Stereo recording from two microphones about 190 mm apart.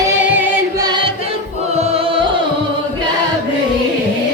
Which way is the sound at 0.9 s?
25° right (ahead or behind).